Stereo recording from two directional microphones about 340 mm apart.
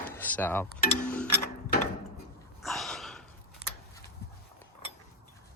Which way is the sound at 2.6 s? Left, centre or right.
Centre.